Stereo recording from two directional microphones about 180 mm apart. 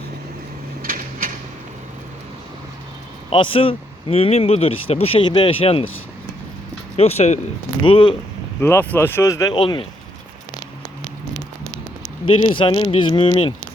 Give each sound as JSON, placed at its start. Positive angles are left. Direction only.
{"t": 0.8, "sound": "a sound", "side_deg": -50}
{"t": 3.2, "sound": "speech", "side_deg": 30}
{"t": 6.9, "sound": "speech", "side_deg": 35}
{"t": 8.6, "sound": "speech", "side_deg": 10}
{"t": 12.2, "sound": "speech", "side_deg": 30}